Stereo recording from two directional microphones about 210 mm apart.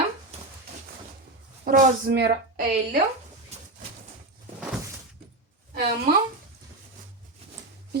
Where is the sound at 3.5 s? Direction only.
30° right (ahead or behind).